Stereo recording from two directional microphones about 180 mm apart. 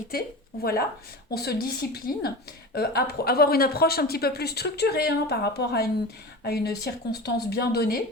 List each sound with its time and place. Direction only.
0.1 s a woman's voice: 55° left (ahead or behind)